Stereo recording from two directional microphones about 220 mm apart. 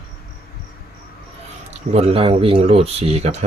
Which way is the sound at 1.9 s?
25° right (ahead or behind).